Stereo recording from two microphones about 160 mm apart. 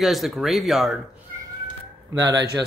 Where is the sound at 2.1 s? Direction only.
20° right (ahead or behind).